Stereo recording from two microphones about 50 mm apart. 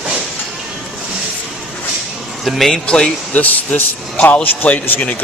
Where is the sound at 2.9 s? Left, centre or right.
Centre.